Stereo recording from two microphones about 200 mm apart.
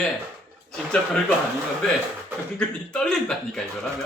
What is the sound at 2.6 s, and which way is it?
A man's voice, 5° left (ahead or behind).